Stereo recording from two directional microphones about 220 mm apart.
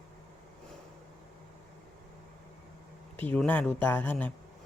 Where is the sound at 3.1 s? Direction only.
5° left (ahead or behind).